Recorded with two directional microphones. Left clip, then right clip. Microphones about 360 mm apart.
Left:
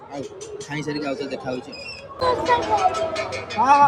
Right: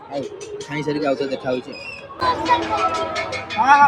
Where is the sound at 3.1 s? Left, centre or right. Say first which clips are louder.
Right 2 dB; centre.